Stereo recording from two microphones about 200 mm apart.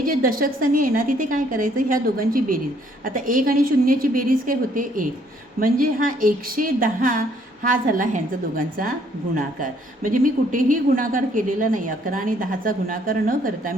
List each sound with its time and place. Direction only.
0.0 s speech: 45° right (ahead or behind)